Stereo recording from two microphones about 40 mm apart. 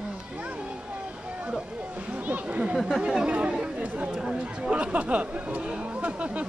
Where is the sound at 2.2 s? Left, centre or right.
Right.